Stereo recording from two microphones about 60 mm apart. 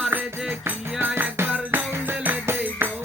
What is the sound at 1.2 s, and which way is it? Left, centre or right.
Music, right.